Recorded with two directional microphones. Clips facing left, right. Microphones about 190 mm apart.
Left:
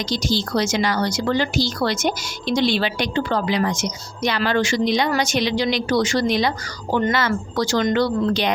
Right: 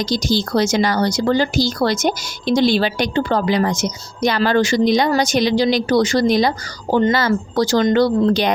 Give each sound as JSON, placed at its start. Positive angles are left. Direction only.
{"t": 0.0, "sound": "speech", "side_deg": -40}